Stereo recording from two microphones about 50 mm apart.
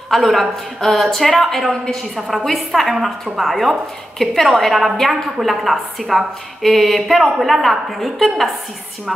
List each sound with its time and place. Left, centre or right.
0.1 s a woman's voice: centre